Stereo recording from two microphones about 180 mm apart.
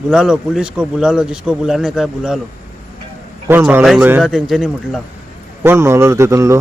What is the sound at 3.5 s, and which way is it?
Speech, 10° right (ahead or behind).